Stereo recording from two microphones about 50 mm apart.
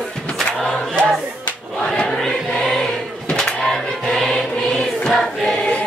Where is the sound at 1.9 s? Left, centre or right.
Centre.